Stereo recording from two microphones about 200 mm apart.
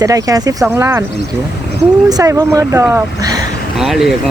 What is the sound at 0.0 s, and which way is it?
Speech, 15° right (ahead or behind).